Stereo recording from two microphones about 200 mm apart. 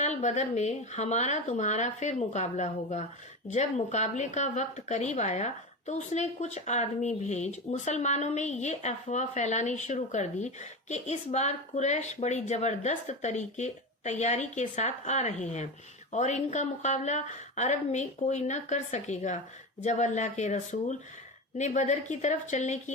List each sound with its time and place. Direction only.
0.0 s speech: 35° left (ahead or behind)